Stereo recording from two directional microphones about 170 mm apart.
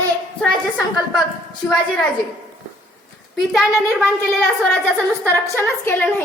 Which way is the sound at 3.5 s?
Centre (ahead or behind).